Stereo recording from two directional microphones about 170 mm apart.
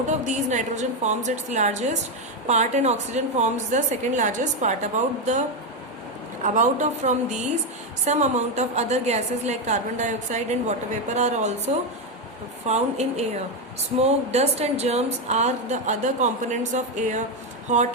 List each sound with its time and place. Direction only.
0.1 s a woman's voice: 45° right (ahead or behind)
6.4 s a woman's voice: 45° right (ahead or behind)
12.6 s a woman's voice: 40° right (ahead or behind)